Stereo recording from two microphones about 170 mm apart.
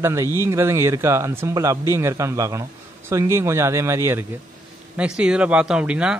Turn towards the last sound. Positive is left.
turn(degrees=-5)  # may be behind; listen again after turning